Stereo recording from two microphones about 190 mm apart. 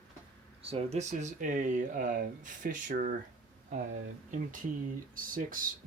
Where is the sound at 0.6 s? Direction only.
30° right (ahead or behind).